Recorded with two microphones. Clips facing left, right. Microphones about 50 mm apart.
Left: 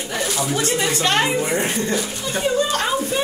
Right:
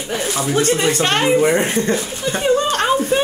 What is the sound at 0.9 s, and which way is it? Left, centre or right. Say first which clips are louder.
Speech: right 2 dB; right.